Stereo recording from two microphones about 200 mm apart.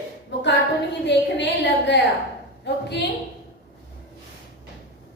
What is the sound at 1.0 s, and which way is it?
A woman's voice, 60° left (ahead or behind).